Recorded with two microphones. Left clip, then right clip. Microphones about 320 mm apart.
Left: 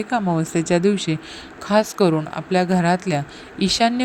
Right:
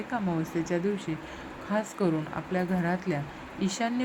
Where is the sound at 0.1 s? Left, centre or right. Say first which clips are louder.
Left 10 dB; centre.